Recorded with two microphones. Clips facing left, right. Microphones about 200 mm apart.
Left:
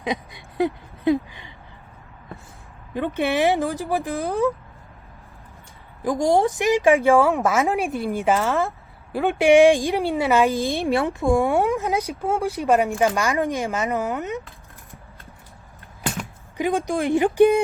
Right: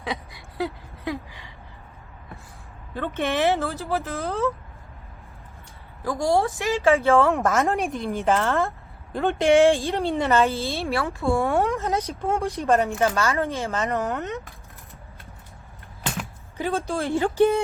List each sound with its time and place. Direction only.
0.0 s a sound: 20° left (ahead or behind)
2.9 s a woman's voice: 15° left (ahead or behind)
6.1 s a woman's voice: 20° left (ahead or behind)
16.6 s a woman's voice: 15° left (ahead or behind)